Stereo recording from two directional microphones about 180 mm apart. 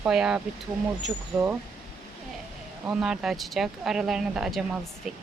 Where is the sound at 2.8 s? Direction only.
5° right (ahead or behind).